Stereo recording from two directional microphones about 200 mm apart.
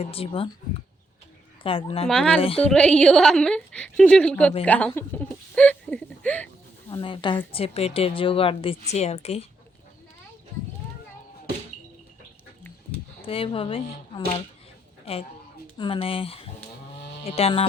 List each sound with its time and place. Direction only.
0.0 s speech: 30° left (ahead or behind)
1.6 s speech: 25° left (ahead or behind)
2.0 s a woman's voice: 5° left (ahead or behind)
2.4 s speech: 30° left (ahead or behind)
2.6 s a woman's voice: 5° left (ahead or behind)
4.9 s a sound: 10° left (ahead or behind)
6.9 s speech: 25° left (ahead or behind)
13.2 s speech: 30° left (ahead or behind)
15.8 s speech: 25° left (ahead or behind)